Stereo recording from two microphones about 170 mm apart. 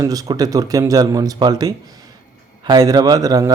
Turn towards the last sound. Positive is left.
turn(degrees=-20)  # may be behind; listen again after turning